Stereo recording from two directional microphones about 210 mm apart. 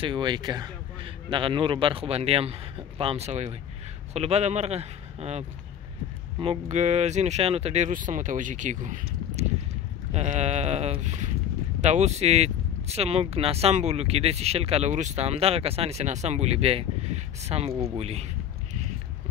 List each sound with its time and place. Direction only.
0.0 s a man's voice: 25° right (ahead or behind)
6.4 s speech: 30° right (ahead or behind)
10.1 s a sound: 30° right (ahead or behind)
11.8 s a man's voice: 35° right (ahead or behind)